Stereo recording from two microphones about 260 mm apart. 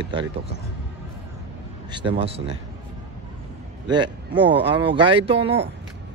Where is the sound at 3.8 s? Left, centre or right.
Centre.